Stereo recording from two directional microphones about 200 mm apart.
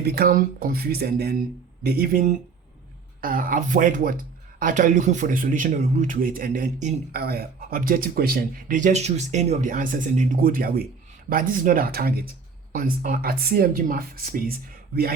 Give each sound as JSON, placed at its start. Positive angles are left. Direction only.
{"t": 0.0, "sound": "a man's voice", "side_deg": -50}